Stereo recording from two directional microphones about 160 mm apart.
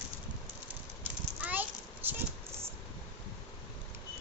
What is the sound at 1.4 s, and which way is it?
Children playing, 10° right (ahead or behind).